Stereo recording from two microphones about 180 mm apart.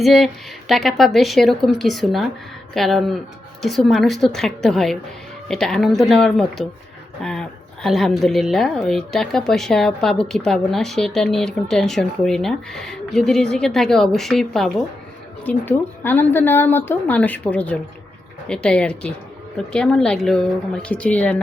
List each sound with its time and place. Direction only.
0.0 s a woman's voice: centre (ahead or behind)